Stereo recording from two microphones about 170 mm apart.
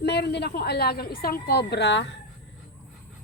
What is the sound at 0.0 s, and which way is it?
A woman's voice, 75° left (ahead or behind).